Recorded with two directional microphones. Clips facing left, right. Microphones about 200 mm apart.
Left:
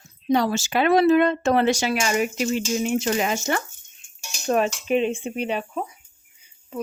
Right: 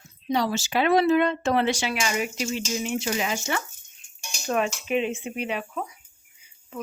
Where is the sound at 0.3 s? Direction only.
50° left (ahead or behind).